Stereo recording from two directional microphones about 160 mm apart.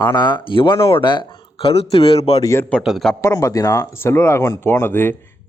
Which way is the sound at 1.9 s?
35° left (ahead or behind).